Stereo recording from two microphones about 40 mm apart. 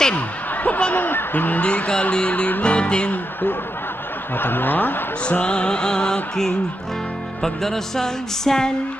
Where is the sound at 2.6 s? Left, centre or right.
Left.